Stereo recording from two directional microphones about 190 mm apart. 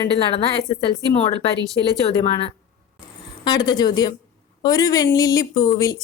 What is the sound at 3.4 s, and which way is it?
A woman's voice, 20° left (ahead or behind).